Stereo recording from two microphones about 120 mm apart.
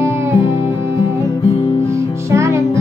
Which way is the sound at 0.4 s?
55° left (ahead or behind).